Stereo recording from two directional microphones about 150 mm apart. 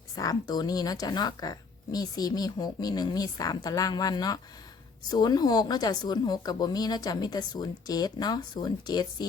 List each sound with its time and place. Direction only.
0.2 s a woman's voice: 25° left (ahead or behind)